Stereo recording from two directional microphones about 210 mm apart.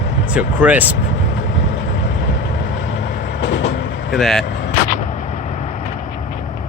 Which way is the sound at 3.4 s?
55° left (ahead or behind).